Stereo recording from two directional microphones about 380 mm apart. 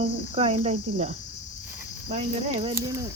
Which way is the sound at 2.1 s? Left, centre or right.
Centre.